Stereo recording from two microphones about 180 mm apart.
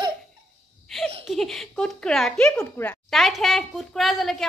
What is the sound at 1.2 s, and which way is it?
Speech, centre (ahead or behind).